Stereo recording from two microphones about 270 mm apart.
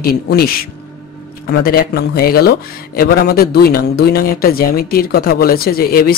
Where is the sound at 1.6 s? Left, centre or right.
Left.